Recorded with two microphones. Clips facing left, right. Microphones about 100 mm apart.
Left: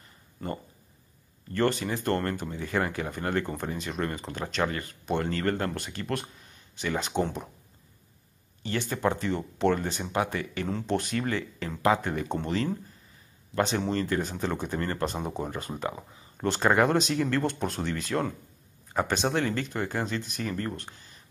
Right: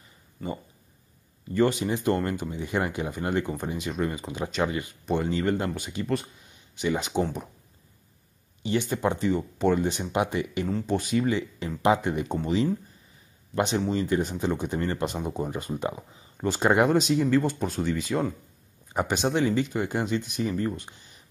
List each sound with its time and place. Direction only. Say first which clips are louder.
0.4 s speech: right 1 dB; centre (ahead or behind)
1.5 s speech: right 3 dB; 10° right (ahead or behind)
8.6 s speech: right 2 dB; 15° right (ahead or behind)
10.1 s speech: right 1 dB; 20° right (ahead or behind)
10.7 s speech: right 1 dB; centre (ahead or behind); by 12.3 s 15° right (ahead or behind)
12.3 s speech: right 4 dB; 5° right (ahead or behind)
13.7 s speech: right 3 dB; 10° right (ahead or behind)
15.2 s speech: right 2 dB; centre (ahead or behind)